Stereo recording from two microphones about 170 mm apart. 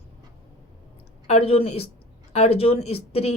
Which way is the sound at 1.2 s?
35° left (ahead or behind).